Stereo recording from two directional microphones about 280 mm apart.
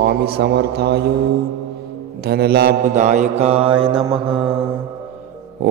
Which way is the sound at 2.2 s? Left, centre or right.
Right.